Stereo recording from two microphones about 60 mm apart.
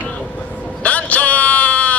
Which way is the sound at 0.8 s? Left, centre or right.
Left.